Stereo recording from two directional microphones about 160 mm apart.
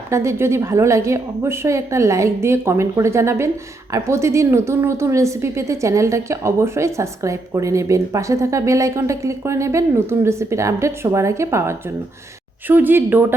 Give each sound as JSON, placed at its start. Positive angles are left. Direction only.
{"t": 0.1, "sound": "a woman's voice", "side_deg": -15}